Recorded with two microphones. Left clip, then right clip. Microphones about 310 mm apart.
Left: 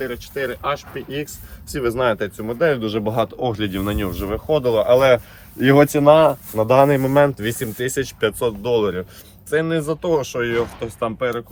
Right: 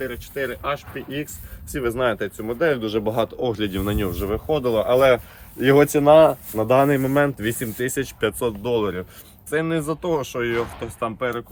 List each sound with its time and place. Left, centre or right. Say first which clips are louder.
0.0 s speech: left 2 dB; centre